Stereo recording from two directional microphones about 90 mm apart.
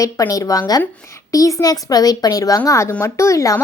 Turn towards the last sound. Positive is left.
turn(degrees=35)  # may be behind; listen again after turning